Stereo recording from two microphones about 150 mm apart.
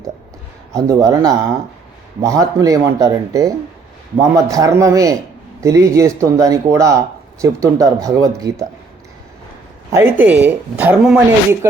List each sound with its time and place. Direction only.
0.8 s speech: 20° right (ahead or behind)
9.9 s speech: 15° right (ahead or behind)